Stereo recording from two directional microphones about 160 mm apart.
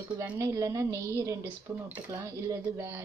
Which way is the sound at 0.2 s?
20° right (ahead or behind).